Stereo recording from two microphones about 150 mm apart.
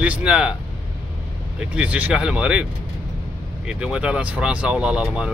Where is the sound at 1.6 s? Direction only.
5° right (ahead or behind).